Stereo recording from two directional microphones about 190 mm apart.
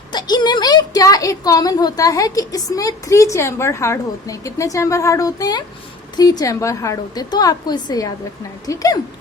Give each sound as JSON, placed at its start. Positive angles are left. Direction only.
{"t": 0.1, "sound": "a woman's voice", "side_deg": 20}